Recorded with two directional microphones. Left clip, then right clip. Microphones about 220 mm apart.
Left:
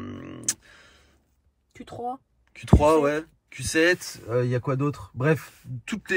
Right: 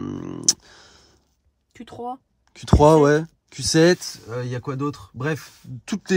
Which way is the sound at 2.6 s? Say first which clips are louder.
Right 5 dB; 20° right (ahead or behind).